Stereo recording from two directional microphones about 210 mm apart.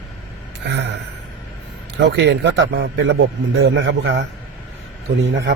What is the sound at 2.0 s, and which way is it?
Speech, 55° right (ahead or behind).